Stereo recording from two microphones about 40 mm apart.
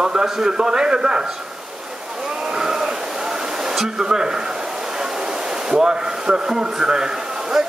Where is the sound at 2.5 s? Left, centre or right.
Centre.